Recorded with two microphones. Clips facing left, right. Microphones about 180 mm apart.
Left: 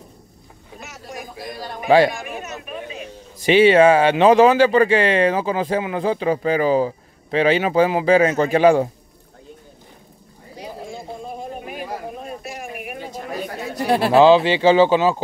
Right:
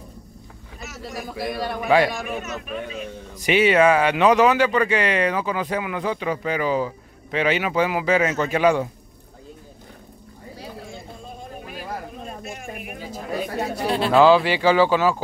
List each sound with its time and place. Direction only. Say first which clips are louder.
1.3 s a man's voice: right 8 dB; 70° right (ahead or behind)
1.9 s speech: left 4 dB; 30° left (ahead or behind)
3.3 s speech: left 5 dB; 30° left (ahead or behind)
13.8 s speech: left 5 dB; 60° left (ahead or behind)
14.1 s speech: left 2 dB; 20° left (ahead or behind)